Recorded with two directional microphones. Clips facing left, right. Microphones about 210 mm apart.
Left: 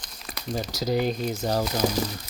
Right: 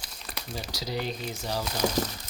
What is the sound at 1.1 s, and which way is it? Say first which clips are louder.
Speech: left 7 dB; 45° left (ahead or behind).